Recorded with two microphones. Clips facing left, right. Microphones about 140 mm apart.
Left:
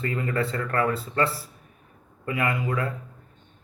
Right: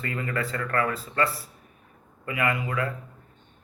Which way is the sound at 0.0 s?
25° left (ahead or behind).